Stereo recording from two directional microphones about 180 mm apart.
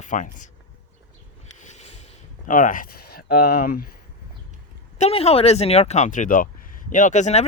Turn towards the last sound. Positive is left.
turn(degrees=40)  # may be behind; listen again after turning